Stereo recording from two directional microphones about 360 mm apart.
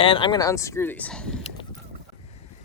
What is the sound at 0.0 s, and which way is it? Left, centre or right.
Speech, centre.